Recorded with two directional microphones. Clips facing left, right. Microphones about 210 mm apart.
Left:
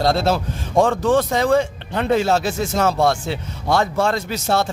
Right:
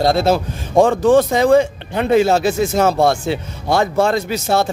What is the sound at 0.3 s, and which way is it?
Speech, 20° right (ahead or behind).